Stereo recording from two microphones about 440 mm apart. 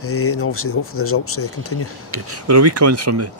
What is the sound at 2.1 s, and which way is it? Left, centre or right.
Speech, right.